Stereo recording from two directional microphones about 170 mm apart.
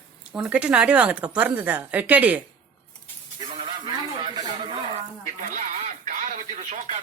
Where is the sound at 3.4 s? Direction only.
25° right (ahead or behind).